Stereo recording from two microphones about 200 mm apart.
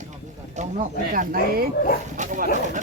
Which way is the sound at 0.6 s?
35° right (ahead or behind).